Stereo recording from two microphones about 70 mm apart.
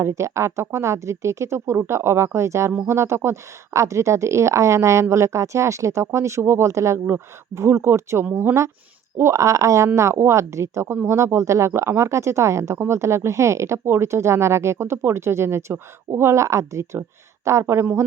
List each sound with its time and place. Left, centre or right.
0.0 s speech: right
8.2 s speech: right
9.1 s speech: right